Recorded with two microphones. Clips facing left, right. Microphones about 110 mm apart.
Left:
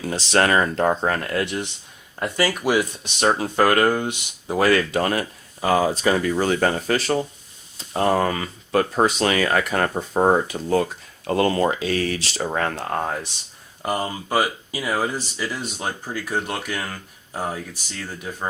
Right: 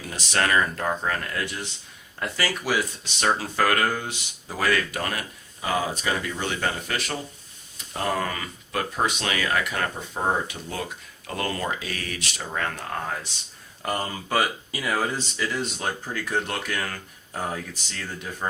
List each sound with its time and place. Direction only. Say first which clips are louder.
0.0 s speech: left 6 dB; 30° left (ahead or behind)
1.0 s speech: left 5 dB; 40° left (ahead or behind)
1.4 s speech: left 6 dB; 25° left (ahead or behind)
13.8 s speech: left 4 dB; 10° left (ahead or behind)